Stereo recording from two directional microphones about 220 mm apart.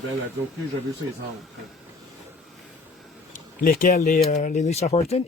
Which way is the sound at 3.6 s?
40° left (ahead or behind).